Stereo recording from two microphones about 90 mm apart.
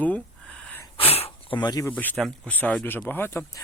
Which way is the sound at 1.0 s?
90° left.